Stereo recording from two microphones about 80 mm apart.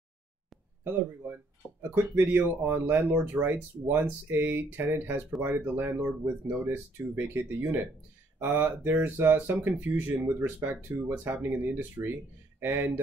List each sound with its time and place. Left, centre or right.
0.8 s speech: right